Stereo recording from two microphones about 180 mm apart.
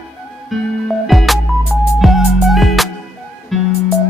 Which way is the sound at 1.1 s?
Centre (ahead or behind).